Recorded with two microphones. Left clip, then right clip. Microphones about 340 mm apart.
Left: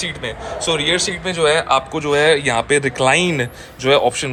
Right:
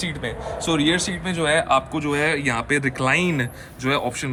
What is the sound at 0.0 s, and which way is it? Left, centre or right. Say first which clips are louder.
Speech: left 4 dB; centre.